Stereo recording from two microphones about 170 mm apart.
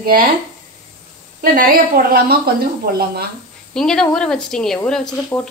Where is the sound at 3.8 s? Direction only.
5° left (ahead or behind).